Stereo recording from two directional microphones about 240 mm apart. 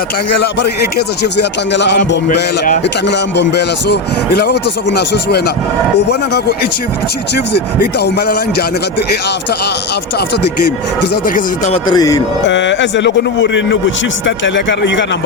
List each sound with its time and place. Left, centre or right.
0.9 s speech: left
7.3 s speech: left
11.3 s speech: left
11.9 s a man's voice: centre
12.5 s speech: left